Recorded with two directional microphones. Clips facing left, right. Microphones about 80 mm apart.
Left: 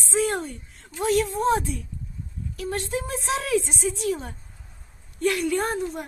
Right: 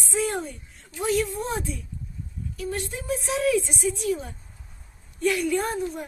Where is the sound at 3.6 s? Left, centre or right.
Left.